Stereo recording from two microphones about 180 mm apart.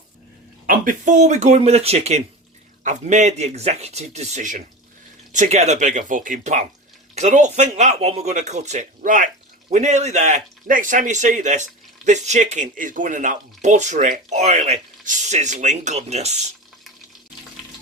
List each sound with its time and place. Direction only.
0.7 s speech: 45° right (ahead or behind)